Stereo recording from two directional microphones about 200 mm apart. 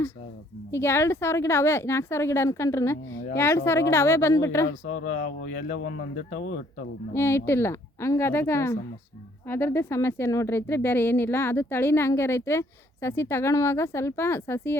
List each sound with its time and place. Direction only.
0.7 s speech: 10° left (ahead or behind)
5.5 s speech: 45° left (ahead or behind)
7.1 s speech: 10° left (ahead or behind)